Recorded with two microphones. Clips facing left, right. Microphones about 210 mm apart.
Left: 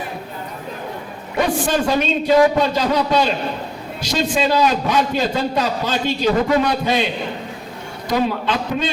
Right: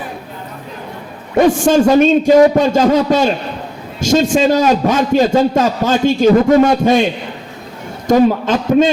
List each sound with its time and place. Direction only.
1.4 s a man's voice: 45° right (ahead or behind)